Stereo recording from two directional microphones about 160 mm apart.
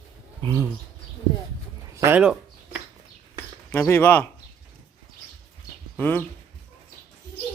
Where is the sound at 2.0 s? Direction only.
10° right (ahead or behind).